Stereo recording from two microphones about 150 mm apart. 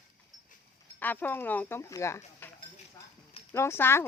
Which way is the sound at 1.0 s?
10° left (ahead or behind).